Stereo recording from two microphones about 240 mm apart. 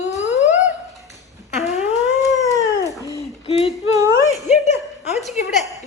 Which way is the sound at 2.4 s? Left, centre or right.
Centre.